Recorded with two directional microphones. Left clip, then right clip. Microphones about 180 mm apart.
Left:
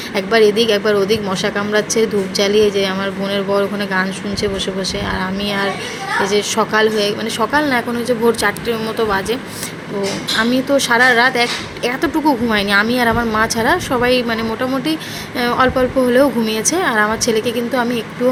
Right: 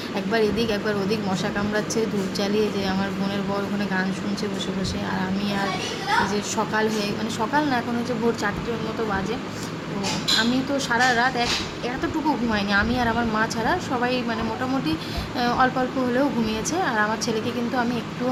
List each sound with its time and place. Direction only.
0.3 s speech: 20° left (ahead or behind)
6.2 s speech: 25° left (ahead or behind)
10.8 s speech: 20° left (ahead or behind)
15.4 s speech: 15° left (ahead or behind)